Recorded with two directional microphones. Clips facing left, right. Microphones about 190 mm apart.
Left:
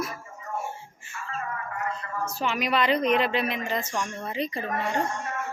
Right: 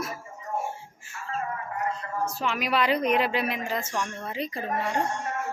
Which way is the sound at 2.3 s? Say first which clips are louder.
Left 3 dB; centre (ahead or behind).